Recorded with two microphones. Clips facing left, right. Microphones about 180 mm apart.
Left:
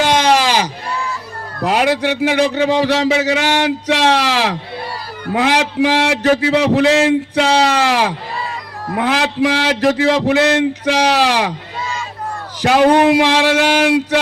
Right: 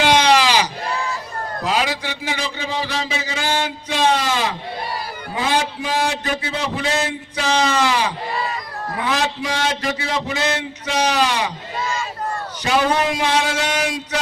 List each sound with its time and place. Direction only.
0.2 s sheep: 45° left (ahead or behind)
1.6 s speech: 60° left (ahead or behind)
12.6 s speech: 65° left (ahead or behind)